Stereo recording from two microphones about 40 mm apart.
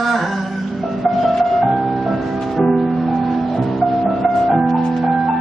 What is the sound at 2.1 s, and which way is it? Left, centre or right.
Music, centre.